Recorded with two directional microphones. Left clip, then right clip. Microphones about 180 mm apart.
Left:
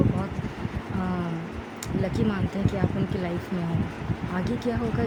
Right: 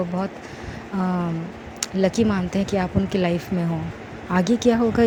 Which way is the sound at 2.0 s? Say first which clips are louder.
Right 8 dB; 35° right (ahead or behind).